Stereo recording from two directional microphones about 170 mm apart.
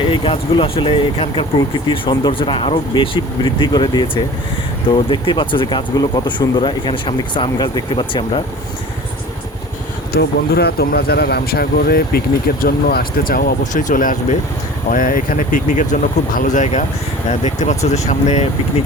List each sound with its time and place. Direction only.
0.1 s speech: 30° left (ahead or behind)
10.1 s speech: 70° left (ahead or behind); by 18.4 s 40° left (ahead or behind)